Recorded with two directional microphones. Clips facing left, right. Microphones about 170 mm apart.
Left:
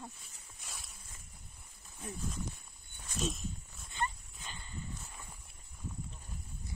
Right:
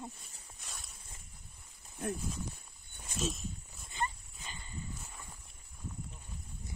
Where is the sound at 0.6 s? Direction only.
Centre (ahead or behind).